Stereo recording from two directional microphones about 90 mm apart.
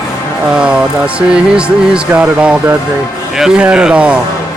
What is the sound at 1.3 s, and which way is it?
Speech, 10° right (ahead or behind).